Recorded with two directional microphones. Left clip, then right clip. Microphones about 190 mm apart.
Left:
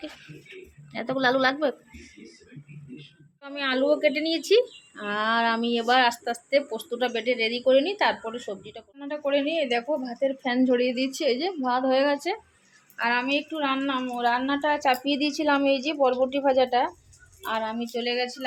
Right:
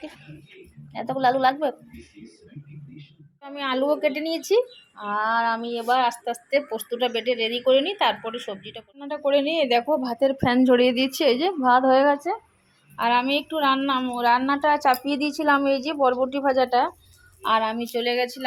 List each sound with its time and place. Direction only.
0.9 s a woman's voice: 10° left (ahead or behind)
3.4 s a woman's voice: centre (ahead or behind)
5.1 s speech: 40° left (ahead or behind)
5.5 s speech: 15° left (ahead or behind); by 16.9 s 10° right (ahead or behind)
17.4 s speech: 25° right (ahead or behind)